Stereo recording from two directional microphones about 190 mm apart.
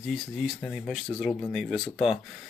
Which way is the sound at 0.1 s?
Centre (ahead or behind).